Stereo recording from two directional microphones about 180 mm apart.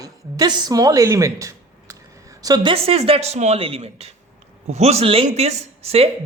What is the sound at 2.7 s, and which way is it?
A man's voice, 35° right (ahead or behind).